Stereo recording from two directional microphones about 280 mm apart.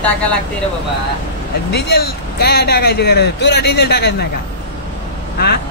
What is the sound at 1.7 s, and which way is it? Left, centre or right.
Speech, left.